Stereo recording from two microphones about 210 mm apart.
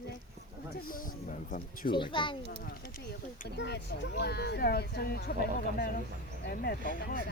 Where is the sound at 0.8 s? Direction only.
40° left (ahead or behind).